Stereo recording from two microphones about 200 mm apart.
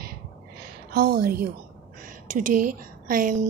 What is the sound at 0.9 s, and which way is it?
A woman's voice, 50° right (ahead or behind).